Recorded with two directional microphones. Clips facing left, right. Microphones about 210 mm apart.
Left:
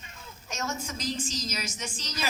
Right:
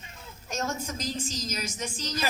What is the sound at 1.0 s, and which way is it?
Speech, 45° right (ahead or behind).